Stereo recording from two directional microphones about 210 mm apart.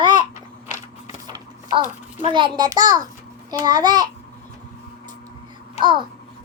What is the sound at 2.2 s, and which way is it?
A child's voice, 25° right (ahead or behind).